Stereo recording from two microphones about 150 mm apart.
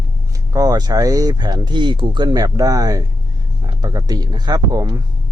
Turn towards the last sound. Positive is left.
turn(degrees=-25)  # may be behind; listen again after turning